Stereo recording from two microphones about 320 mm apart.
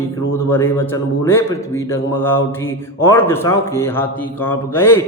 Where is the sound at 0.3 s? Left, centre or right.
Centre.